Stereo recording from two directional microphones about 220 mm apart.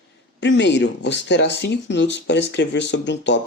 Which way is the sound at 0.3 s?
55° left (ahead or behind).